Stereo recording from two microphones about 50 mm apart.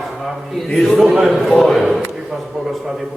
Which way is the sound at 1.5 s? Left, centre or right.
Centre.